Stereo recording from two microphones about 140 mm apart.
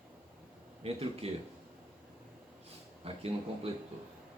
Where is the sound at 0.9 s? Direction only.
45° right (ahead or behind).